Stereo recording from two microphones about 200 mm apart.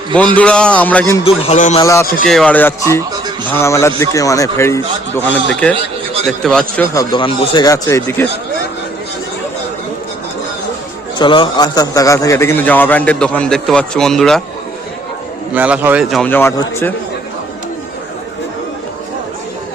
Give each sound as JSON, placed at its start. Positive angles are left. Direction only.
{"t": 0.3, "sound": "a man's voice", "side_deg": 5}
{"t": 1.2, "sound": "a man's voice", "side_deg": 35}
{"t": 1.8, "sound": "a man's voice", "side_deg": 15}
{"t": 2.2, "sound": "a man's voice", "side_deg": 5}
{"t": 6.9, "sound": "a man's voice", "side_deg": 20}
{"t": 11.2, "sound": "a man's voice", "side_deg": 25}
{"t": 15.5, "sound": "a man's voice", "side_deg": -5}